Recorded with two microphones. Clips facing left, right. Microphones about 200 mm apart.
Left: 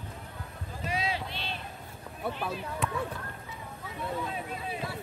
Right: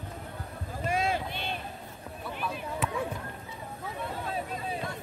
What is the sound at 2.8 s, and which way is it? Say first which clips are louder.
Basketball bounce: even; 5° right (ahead or behind).